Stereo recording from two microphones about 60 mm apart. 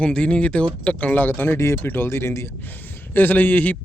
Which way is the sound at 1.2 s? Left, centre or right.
Left.